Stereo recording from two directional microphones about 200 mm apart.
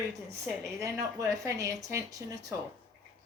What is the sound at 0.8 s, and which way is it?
A woman's voice, 15° right (ahead or behind).